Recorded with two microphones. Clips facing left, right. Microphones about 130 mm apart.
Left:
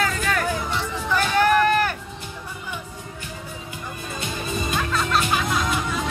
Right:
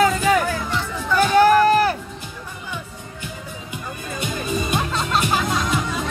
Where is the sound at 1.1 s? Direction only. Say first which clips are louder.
Right 5 dB; 35° right (ahead or behind).